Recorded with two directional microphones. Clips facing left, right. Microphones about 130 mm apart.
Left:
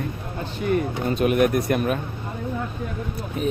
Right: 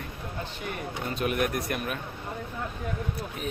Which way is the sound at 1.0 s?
20° left (ahead or behind).